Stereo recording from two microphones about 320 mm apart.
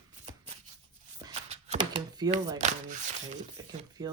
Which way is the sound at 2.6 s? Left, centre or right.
Right.